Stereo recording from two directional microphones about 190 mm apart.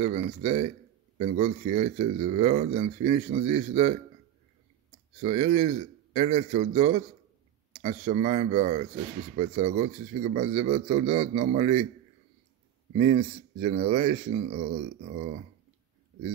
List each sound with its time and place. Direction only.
0.0 s speech: 35° right (ahead or behind)
5.2 s speech: 35° right (ahead or behind)
12.9 s speech: 35° right (ahead or behind)